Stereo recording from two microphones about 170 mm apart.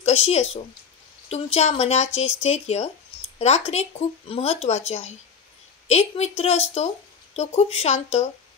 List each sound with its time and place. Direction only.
0.0 s a woman's voice: 40° left (ahead or behind)